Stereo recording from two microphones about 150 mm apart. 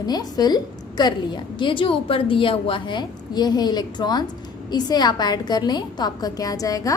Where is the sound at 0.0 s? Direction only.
25° left (ahead or behind).